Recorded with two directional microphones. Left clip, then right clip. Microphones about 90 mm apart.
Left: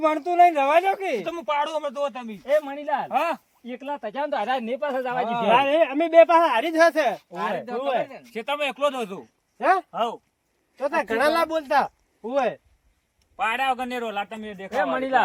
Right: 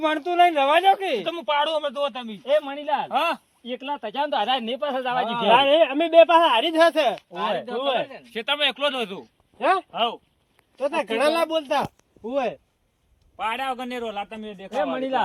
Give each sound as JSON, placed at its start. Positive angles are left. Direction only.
{"t": 0.0, "sound": "speech", "side_deg": 45}
{"t": 1.2, "sound": "speech", "side_deg": 0}
{"t": 2.4, "sound": "speech", "side_deg": -15}
{"t": 2.8, "sound": "speech", "side_deg": 15}
{"t": 4.1, "sound": "speech", "side_deg": 45}
{"t": 5.2, "sound": "speech", "side_deg": -30}
{"t": 6.7, "sound": "speech", "side_deg": 0}
{"t": 8.3, "sound": "speech", "side_deg": 50}
{"t": 9.6, "sound": "speech", "side_deg": -25}
{"t": 9.9, "sound": "speech", "side_deg": 30}
{"t": 10.8, "sound": "speech", "side_deg": -30}
{"t": 11.6, "sound": "speech", "side_deg": -15}
{"t": 13.3, "sound": "a man's voice", "side_deg": 10}
{"t": 14.8, "sound": "speech", "side_deg": 55}